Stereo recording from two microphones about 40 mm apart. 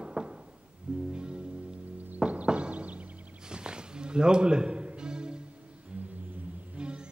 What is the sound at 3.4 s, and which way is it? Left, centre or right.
Music, right.